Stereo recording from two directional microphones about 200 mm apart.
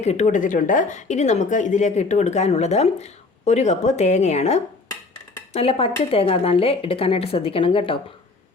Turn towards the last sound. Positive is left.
turn(degrees=25)  # may be behind; listen again after turning